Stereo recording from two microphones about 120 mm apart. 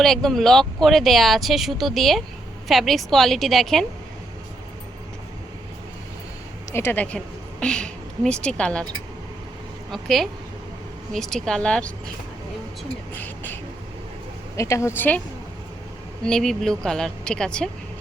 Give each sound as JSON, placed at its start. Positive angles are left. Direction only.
{"t": 0.0, "sound": "speech", "side_deg": 5}
{"t": 6.7, "sound": "a woman's voice", "side_deg": 15}
{"t": 9.9, "sound": "speech", "side_deg": 0}
{"t": 13.1, "sound": "beatboxing", "side_deg": 15}
{"t": 14.5, "sound": "speech", "side_deg": 25}
{"t": 16.2, "sound": "speech", "side_deg": 5}